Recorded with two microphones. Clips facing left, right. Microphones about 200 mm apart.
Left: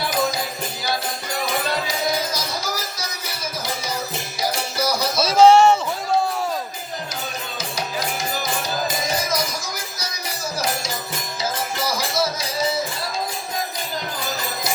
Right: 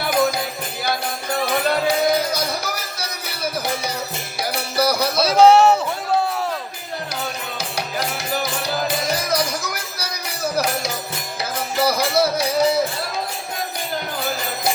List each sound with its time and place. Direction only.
0.1 s music: 55° right (ahead or behind)
1.9 s music: 60° right (ahead or behind)
5.3 s a sound: centre (ahead or behind)
7.6 s music: 65° right (ahead or behind)